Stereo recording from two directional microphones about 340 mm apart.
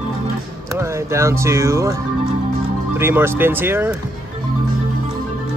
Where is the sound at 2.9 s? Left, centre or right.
Centre.